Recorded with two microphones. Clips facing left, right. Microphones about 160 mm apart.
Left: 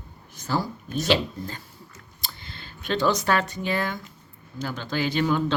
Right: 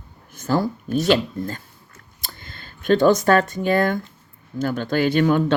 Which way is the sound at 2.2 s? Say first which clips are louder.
Right 1 dB; 50° right (ahead or behind).